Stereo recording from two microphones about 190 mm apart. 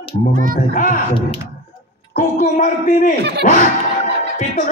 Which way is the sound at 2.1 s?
40° left (ahead or behind).